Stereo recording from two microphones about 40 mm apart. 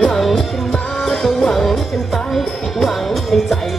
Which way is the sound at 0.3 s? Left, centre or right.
Centre.